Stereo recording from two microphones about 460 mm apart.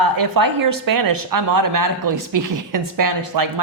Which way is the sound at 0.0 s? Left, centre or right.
Right.